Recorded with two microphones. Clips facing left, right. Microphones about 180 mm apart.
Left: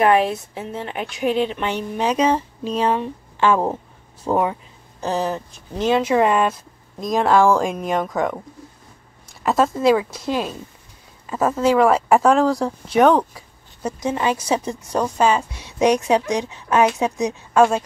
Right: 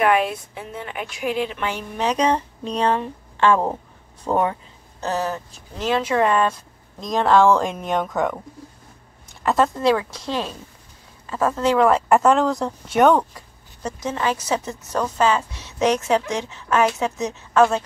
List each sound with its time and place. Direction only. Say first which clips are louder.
0.0 s speech: left 3 dB; 30° left (ahead or behind)
2.0 s speech: left 1 dB; 5° left (ahead or behind)
7.0 s speech: even; 5° left (ahead or behind)
9.4 s speech: left 1 dB; centre (ahead or behind)
13.8 s speech: left 3 dB; 15° left (ahead or behind)